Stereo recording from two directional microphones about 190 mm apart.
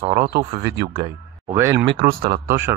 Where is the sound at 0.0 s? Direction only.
15° right (ahead or behind).